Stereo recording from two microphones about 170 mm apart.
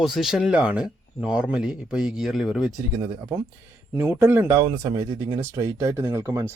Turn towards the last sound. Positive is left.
turn(degrees=-15)  # may be behind; listen again after turning